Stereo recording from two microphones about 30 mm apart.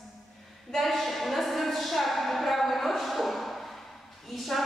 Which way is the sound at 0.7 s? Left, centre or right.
Centre.